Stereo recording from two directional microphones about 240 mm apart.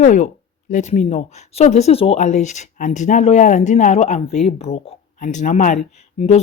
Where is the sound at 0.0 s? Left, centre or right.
Left.